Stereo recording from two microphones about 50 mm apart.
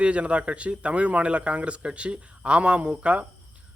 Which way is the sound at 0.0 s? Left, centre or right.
Right.